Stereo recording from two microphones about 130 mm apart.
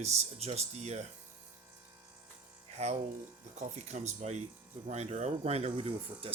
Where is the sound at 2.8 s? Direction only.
55° right (ahead or behind).